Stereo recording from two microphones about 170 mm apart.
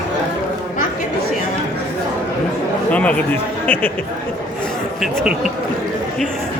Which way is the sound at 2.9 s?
10° left (ahead or behind).